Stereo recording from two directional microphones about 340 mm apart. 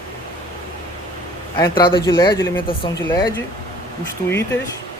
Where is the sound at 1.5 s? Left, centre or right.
Centre.